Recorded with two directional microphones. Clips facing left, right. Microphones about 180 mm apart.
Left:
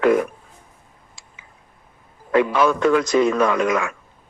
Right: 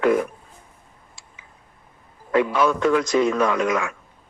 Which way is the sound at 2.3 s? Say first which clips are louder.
Left 2 dB; 85° left.